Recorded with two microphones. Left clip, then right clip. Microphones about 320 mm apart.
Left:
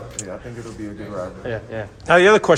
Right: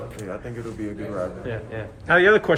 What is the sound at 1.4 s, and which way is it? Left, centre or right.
Speech, left.